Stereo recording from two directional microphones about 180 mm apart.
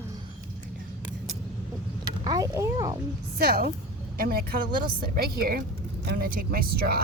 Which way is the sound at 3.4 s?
60° right (ahead or behind).